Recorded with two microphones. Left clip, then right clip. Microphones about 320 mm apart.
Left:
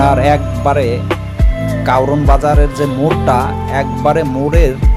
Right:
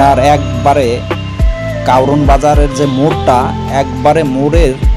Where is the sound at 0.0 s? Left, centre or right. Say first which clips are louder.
Right 4 dB; left.